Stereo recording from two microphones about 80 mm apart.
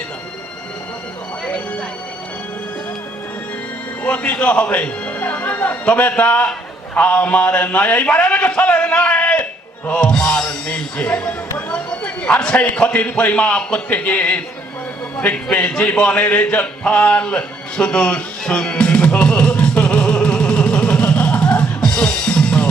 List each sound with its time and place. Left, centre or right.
1.5 s music: centre
4.0 s a man's voice: centre
15.2 s a sound: centre